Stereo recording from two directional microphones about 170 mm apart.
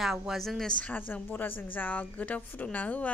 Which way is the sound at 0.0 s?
Centre (ahead or behind).